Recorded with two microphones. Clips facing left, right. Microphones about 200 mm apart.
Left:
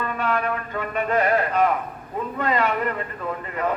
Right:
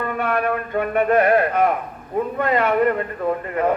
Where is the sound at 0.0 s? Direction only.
55° right (ahead or behind).